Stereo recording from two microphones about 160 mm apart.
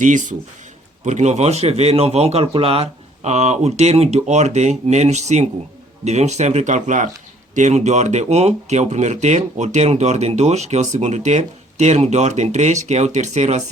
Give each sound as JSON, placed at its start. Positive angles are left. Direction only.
{"t": 0.0, "sound": "speech", "side_deg": -50}